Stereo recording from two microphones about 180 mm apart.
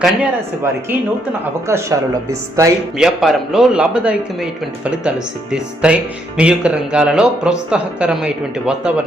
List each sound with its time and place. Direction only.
0.0 s speech: 10° right (ahead or behind)
3.0 s speech: centre (ahead or behind)